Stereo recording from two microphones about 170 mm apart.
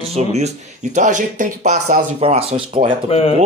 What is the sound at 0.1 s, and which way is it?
Speech, 40° right (ahead or behind).